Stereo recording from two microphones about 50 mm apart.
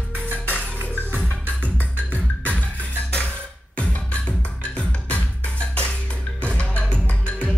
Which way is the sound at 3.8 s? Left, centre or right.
Left.